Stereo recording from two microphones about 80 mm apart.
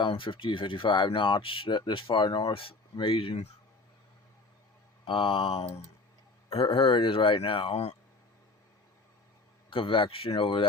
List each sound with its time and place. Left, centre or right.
0.0 s speech: left
2.9 s speech: left
5.0 s speech: left
6.7 s speech: left
9.6 s speech: left